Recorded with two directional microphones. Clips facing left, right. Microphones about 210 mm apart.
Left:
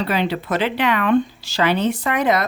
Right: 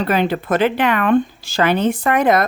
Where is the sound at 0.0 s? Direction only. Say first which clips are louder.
Right 3 dB; 50° right (ahead or behind).